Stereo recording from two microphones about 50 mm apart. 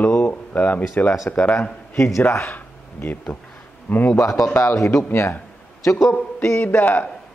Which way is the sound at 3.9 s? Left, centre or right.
Left.